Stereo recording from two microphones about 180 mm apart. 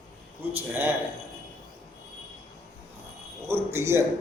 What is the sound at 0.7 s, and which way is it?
Speech, 10° right (ahead or behind).